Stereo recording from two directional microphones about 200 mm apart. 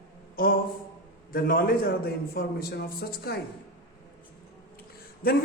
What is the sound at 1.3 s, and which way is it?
A man's voice, 50° left (ahead or behind).